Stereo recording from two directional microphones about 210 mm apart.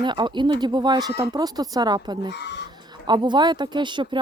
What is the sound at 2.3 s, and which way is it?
Speech, 55° left (ahead or behind).